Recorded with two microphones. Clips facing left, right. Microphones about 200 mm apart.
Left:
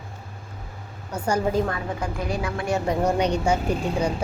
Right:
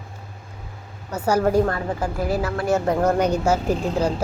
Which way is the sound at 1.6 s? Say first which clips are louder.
Right 4 dB; 40° right (ahead or behind).